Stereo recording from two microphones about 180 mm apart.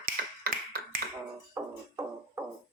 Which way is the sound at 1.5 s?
15° right (ahead or behind).